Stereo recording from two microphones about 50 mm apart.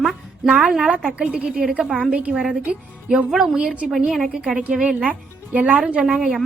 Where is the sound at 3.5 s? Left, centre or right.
Right.